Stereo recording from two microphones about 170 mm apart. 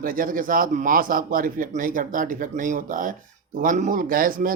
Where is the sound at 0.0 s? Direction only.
55° right (ahead or behind).